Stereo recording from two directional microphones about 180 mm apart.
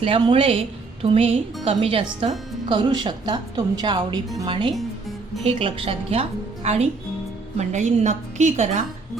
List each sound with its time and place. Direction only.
0.0 s a woman's voice: 30° right (ahead or behind)